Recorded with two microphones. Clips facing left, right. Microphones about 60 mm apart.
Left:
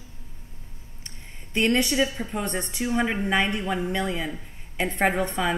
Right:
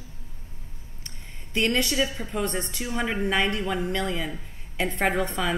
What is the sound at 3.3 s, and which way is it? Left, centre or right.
A woman's voice, left.